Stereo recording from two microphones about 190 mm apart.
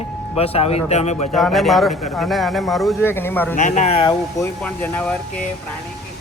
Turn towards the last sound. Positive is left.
turn(degrees=5)  # may be behind; listen again after turning